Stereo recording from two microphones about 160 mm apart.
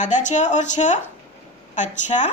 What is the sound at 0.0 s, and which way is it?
A woman's voice, 50° left (ahead or behind).